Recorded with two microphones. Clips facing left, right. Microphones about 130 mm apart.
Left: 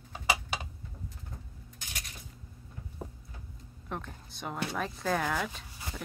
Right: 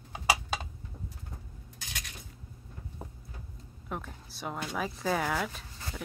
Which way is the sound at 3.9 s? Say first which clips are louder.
Even; 5° right (ahead or behind).